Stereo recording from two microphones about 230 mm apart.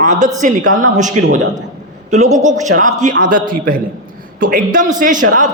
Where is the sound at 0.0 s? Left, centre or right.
Right.